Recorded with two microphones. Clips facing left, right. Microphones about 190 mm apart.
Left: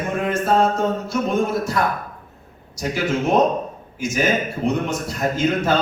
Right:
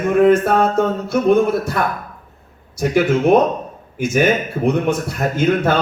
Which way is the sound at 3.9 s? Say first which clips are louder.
Right 5 dB; 55° right (ahead or behind).